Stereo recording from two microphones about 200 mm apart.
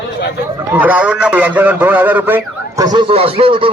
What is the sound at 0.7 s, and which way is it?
A man's voice, 5° right (ahead or behind).